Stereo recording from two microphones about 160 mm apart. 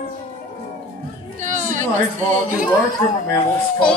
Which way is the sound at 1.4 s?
50° right (ahead or behind).